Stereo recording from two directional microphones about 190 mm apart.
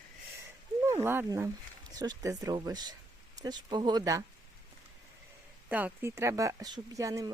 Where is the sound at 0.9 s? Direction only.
15° right (ahead or behind).